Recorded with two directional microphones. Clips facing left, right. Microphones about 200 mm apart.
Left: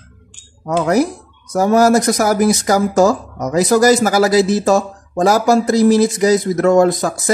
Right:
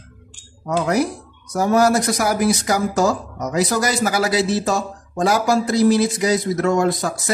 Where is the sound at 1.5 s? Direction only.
45° left (ahead or behind).